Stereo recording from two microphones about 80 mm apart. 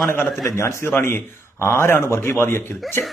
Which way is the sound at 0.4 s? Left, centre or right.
Left.